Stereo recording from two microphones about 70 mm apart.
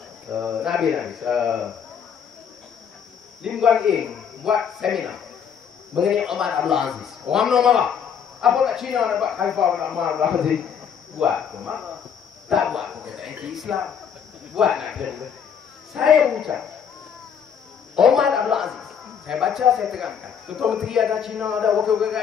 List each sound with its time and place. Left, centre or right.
0.3 s speech: centre
0.7 s speech: centre
3.4 s a man's voice: centre
9.3 s a man's voice: centre
15.9 s speech: centre
17.9 s speech: centre